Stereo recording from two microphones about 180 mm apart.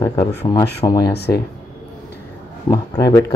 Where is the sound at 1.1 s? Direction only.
65° left (ahead or behind).